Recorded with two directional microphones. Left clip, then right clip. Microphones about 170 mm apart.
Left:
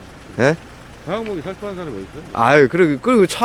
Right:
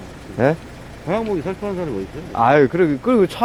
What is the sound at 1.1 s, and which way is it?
Speech, 25° left (ahead or behind).